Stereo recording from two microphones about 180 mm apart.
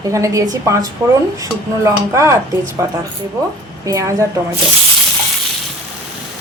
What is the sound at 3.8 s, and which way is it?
Speech, 20° right (ahead or behind).